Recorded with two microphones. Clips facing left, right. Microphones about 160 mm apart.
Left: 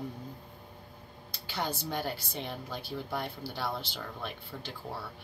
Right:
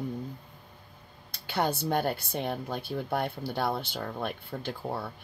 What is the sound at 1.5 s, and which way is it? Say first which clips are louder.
A woman's voice: right 7 dB; 55° right (ahead or behind).